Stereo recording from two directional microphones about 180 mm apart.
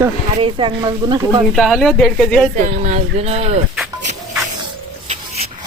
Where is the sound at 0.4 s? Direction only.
30° right (ahead or behind).